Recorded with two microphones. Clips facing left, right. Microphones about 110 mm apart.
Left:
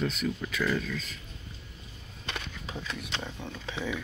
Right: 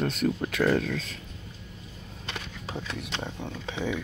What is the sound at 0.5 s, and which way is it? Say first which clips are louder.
Speech: right 6 dB; 60° right (ahead or behind).